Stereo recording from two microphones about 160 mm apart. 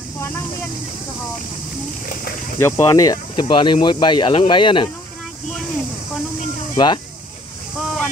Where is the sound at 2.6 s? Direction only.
20° left (ahead or behind).